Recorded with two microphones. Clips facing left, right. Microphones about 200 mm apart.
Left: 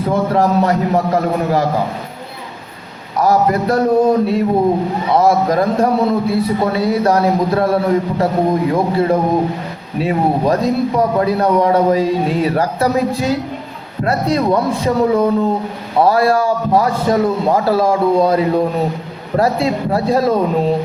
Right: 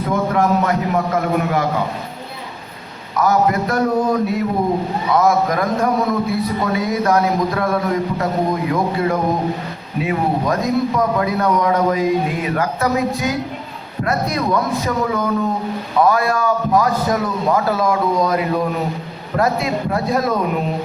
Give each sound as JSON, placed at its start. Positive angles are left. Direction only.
{"t": 0.1, "sound": "a man's voice", "side_deg": 35}
{"t": 3.2, "sound": "a man's voice", "side_deg": 30}